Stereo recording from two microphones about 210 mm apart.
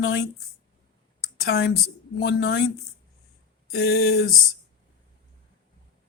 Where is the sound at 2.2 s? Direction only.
50° left (ahead or behind).